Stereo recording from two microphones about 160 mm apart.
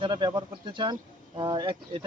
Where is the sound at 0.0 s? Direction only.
25° right (ahead or behind).